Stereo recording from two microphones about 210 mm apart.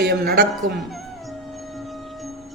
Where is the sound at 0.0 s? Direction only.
50° right (ahead or behind).